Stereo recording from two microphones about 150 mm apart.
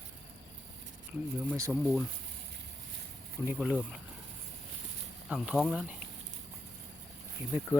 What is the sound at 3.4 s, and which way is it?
Speech, 10° right (ahead or behind).